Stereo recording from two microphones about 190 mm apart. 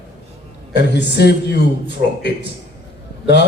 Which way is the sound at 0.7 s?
65° left (ahead or behind).